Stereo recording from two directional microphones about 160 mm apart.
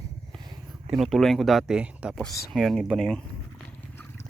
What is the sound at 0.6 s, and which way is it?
Speech, centre (ahead or behind).